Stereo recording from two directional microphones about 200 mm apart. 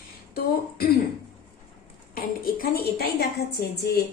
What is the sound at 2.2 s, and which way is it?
A woman's voice, 45° left (ahead or behind).